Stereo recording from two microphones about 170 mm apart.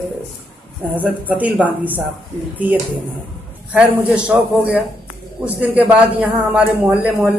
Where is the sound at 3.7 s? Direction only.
5° right (ahead or behind).